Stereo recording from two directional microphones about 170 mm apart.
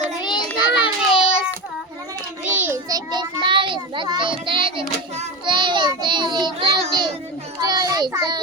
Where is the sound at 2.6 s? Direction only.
10° right (ahead or behind).